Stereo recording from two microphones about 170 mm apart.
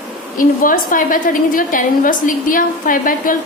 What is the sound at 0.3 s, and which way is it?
A woman's voice, 55° left (ahead or behind).